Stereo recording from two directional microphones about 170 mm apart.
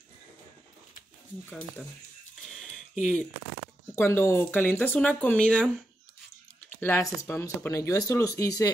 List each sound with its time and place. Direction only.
2.5 s a sound: 5° left (ahead or behind)
3.9 s speech: 15° left (ahead or behind)
6.8 s speech: 15° left (ahead or behind)